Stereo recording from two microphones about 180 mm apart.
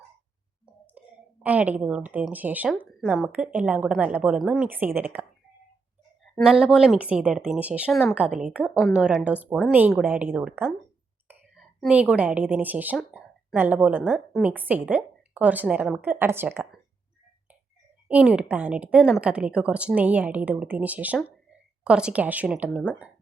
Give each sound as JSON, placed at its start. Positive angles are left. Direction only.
{"t": 0.6, "sound": "a woman's voice", "side_deg": -5}
{"t": 6.4, "sound": "a woman's voice", "side_deg": -5}
{"t": 18.1, "sound": "a woman's voice", "side_deg": -5}